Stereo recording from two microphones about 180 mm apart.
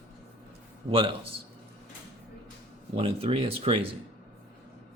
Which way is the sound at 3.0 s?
35° right (ahead or behind).